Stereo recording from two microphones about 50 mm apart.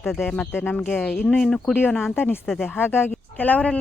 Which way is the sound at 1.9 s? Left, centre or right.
Centre.